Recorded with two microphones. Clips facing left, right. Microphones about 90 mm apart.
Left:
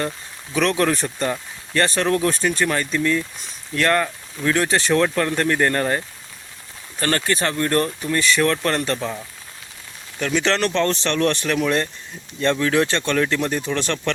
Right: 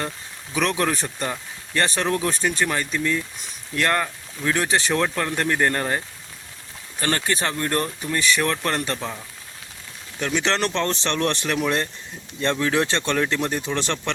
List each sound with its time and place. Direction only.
0.5 s speech: 15° right (ahead or behind)
7.0 s speech: 20° right (ahead or behind)
10.2 s speech: 15° right (ahead or behind)